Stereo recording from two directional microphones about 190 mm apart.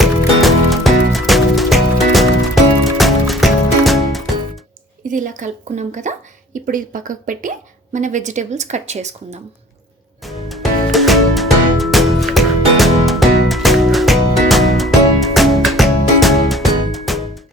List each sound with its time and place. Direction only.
0.0 s music: centre (ahead or behind)
5.0 s a woman's voice: 40° right (ahead or behind)
10.2 s music: centre (ahead or behind)